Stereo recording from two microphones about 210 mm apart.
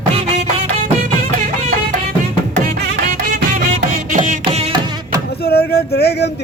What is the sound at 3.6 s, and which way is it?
Music, 35° right (ahead or behind).